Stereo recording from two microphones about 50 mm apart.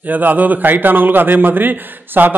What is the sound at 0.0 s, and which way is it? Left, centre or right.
A man's voice, right.